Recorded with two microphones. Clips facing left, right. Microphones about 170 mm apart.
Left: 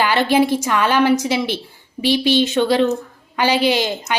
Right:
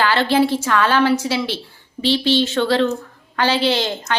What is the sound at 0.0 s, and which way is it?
A woman's voice, 15° left (ahead or behind).